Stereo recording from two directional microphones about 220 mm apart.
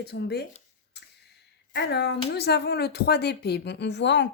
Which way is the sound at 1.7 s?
50° left (ahead or behind).